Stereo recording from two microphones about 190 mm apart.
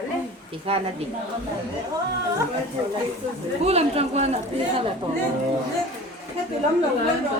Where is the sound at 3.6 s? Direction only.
35° right (ahead or behind).